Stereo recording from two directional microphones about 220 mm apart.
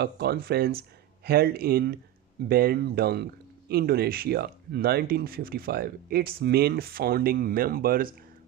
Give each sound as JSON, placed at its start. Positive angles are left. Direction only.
{"t": 0.0, "sound": "speech", "side_deg": -45}